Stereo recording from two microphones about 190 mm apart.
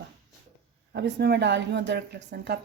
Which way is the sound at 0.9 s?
60° right (ahead or behind).